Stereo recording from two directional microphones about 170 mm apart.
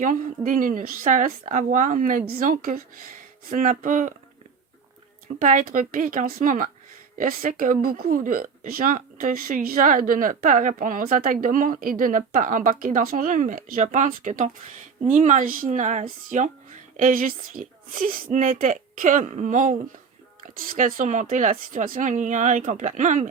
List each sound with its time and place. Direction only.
0.0 s speech: 50° right (ahead or behind)
5.4 s speech: 50° right (ahead or behind)